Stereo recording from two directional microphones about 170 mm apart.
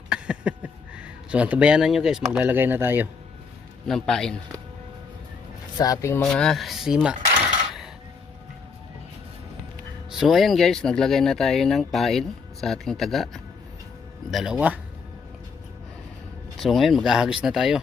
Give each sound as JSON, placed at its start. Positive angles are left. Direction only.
{"t": 0.1, "sound": "speech", "side_deg": -5}
{"t": 3.8, "sound": "speech", "side_deg": 5}
{"t": 5.7, "sound": "speech", "side_deg": 20}
{"t": 6.3, "sound": "speech", "side_deg": 0}
{"t": 10.1, "sound": "speech", "side_deg": 0}
{"t": 16.6, "sound": "speech", "side_deg": 0}